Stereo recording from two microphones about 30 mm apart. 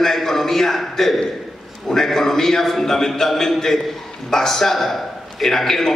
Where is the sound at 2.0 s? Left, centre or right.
Centre.